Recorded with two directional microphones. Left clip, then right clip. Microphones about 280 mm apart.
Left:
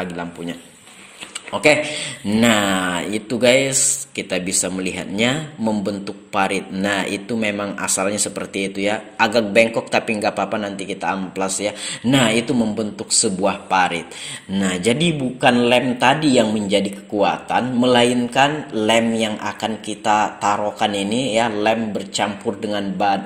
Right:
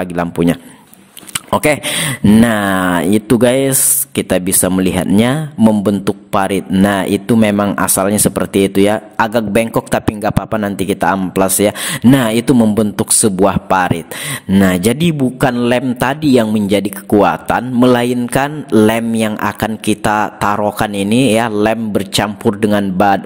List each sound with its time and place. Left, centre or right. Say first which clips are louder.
0.0 s speech: right 11 dB; right